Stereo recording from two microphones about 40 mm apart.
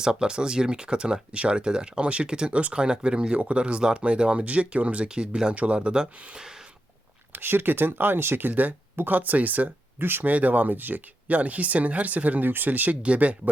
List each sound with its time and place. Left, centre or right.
0.0 s speech: centre
2.5 s speech: right
2.7 s speech: right
6.3 s a sound: centre
7.3 s speech: right
8.4 s speech: right
10.0 s speech: right
10.2 s speech: right
11.3 s speech: right
12.5 s speech: right
13.0 s speech: right